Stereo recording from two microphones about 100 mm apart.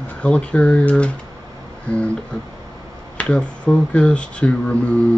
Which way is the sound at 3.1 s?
10° left (ahead or behind).